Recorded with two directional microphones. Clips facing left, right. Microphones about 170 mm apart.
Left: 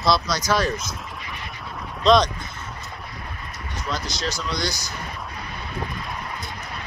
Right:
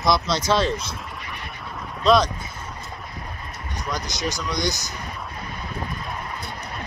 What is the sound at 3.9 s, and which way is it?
Speech, 20° right (ahead or behind).